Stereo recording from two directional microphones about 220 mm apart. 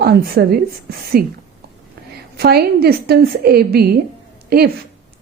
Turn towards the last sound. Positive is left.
turn(degrees=-45)  # may be behind; listen again after turning